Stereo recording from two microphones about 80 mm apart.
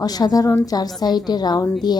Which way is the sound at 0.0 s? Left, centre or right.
Left.